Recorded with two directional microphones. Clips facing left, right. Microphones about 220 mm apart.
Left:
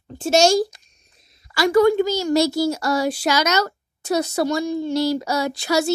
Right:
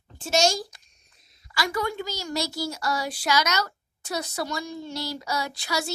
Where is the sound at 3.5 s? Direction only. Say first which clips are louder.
Left 8 dB; 45° left (ahead or behind).